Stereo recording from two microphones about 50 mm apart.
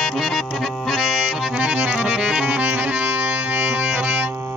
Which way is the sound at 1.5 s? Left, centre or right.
Right.